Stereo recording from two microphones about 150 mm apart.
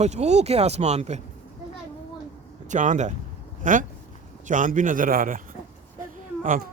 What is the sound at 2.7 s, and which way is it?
Speech, 55° right (ahead or behind).